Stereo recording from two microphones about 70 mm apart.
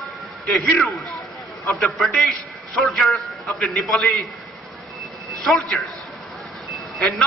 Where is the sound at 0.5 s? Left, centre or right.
Left.